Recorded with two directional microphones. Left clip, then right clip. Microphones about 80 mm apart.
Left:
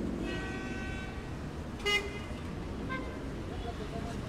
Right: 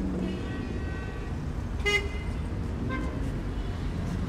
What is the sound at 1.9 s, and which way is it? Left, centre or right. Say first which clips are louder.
Vehicle: right 4 dB; right.